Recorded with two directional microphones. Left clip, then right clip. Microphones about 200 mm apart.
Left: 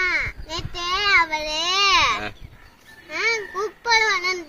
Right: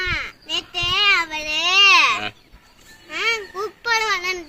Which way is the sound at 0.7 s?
15° right (ahead or behind).